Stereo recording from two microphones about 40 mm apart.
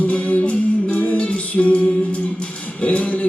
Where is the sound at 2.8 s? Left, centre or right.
Left.